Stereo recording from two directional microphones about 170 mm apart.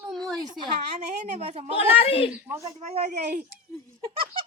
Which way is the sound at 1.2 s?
40° right (ahead or behind).